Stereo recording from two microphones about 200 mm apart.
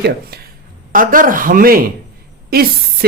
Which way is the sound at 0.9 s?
45° right (ahead or behind).